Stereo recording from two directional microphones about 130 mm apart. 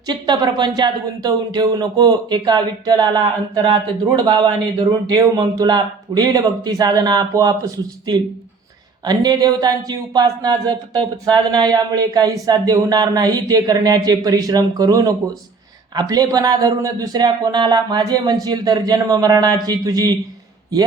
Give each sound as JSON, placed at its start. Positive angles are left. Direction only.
{"t": 0.1, "sound": "speech", "side_deg": -35}
{"t": 9.0, "sound": "speech", "side_deg": -30}